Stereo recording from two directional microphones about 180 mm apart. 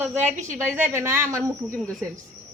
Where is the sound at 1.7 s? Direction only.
5° left (ahead or behind).